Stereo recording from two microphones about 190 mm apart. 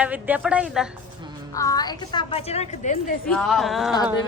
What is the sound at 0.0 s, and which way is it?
Speech, 10° right (ahead or behind).